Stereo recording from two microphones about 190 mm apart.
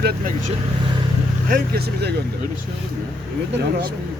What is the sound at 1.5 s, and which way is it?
Speech, 50° right (ahead or behind).